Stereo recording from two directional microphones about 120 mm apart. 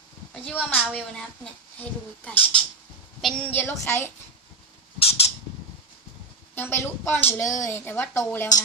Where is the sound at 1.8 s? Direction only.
15° left (ahead or behind).